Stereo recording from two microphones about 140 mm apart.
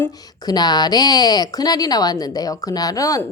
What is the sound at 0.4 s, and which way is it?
A woman's voice, 30° left (ahead or behind).